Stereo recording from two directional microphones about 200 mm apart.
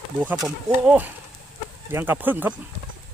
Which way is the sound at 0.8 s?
10° right (ahead or behind).